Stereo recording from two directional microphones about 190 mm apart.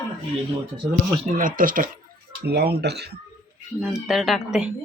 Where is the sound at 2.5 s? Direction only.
60° right (ahead or behind).